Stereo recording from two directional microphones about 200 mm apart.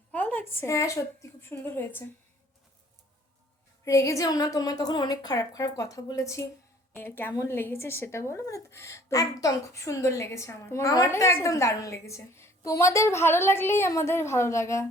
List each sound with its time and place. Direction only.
0.1 s a woman's voice: 10° left (ahead or behind)
3.8 s speech: 15° left (ahead or behind)